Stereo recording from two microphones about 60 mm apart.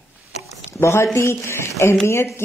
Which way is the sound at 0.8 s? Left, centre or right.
Left.